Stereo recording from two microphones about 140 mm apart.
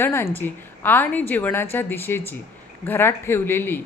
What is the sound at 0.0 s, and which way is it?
A woman's voice, 15° left (ahead or behind).